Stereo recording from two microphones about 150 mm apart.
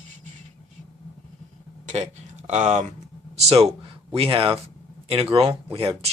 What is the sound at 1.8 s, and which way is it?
Speech, 50° right (ahead or behind).